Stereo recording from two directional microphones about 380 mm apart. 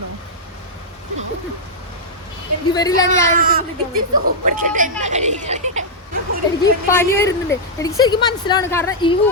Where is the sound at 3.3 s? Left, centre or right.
Right.